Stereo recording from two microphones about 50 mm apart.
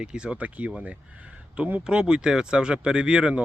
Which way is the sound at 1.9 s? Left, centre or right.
Centre.